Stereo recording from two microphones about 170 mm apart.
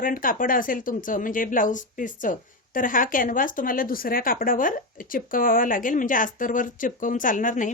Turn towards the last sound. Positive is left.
turn(degrees=50)  # may be behind; listen again after turning